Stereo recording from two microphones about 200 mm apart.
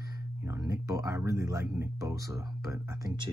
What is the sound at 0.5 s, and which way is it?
Speech, 15° right (ahead or behind).